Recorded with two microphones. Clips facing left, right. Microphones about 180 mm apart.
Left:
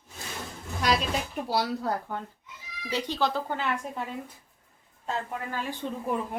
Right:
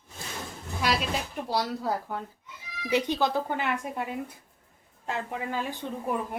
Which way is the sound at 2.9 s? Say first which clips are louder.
Right 3 dB; 15° right (ahead or behind).